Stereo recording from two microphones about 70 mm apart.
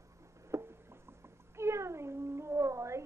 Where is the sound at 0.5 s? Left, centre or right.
Right.